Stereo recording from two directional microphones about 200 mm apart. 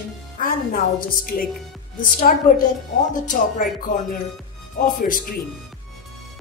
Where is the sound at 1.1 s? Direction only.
45° left (ahead or behind).